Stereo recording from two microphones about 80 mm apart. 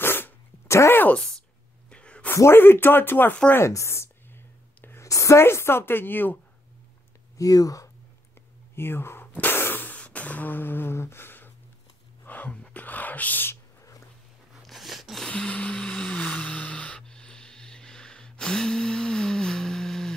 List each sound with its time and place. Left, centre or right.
0.0 s dog: left
1.1 s speech: centre
1.9 s a sound: centre
2.3 s speech: left
3.5 s a woman's voice: left
7.3 s speech: left
8.7 s speech: left
9.4 s a sound: left
14.6 s a sound: centre
15.2 s music: centre